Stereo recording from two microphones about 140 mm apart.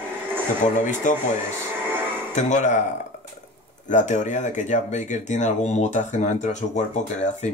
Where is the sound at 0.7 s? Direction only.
60° left (ahead or behind).